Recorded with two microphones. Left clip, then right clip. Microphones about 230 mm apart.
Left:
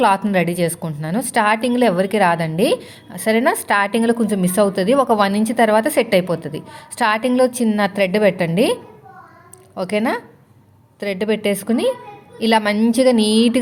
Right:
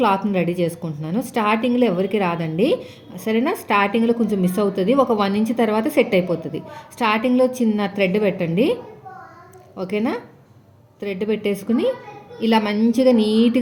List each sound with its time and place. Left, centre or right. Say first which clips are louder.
0.3 s a woman's voice: left 3 dB; left